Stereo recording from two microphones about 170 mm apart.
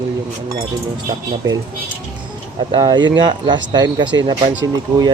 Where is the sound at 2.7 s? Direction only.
25° right (ahead or behind).